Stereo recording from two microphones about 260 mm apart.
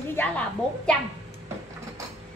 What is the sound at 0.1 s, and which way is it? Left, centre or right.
Speech, centre.